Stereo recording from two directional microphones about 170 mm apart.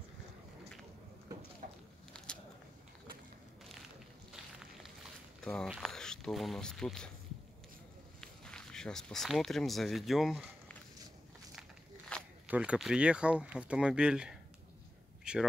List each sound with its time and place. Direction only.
1.6 s a sound: 55° right (ahead or behind)
5.4 s speech: 5° left (ahead or behind)
8.2 s speech: 5° left (ahead or behind)
12.1 s walk: 5° left (ahead or behind)
12.4 s speech: 5° right (ahead or behind)
15.3 s a sound: 5° right (ahead or behind)